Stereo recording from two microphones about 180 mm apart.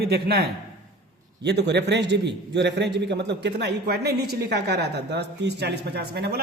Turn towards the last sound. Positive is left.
turn(degrees=-65)  # may be behind; listen again after turning